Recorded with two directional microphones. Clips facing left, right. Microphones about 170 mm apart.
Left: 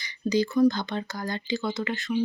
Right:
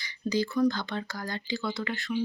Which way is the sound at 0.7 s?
20° left (ahead or behind).